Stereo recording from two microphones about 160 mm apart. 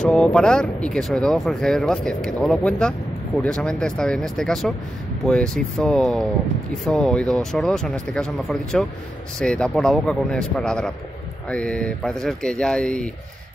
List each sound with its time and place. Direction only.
0.0 s speech: 5° left (ahead or behind)